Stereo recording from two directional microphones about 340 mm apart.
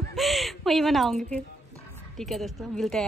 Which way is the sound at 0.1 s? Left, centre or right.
Centre.